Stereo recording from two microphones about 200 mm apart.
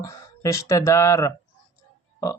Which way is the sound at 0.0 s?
15° left (ahead or behind).